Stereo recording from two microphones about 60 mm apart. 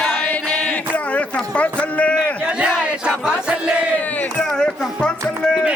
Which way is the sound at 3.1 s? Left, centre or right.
Centre.